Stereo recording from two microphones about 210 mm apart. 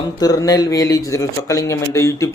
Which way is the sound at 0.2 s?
15° left (ahead or behind).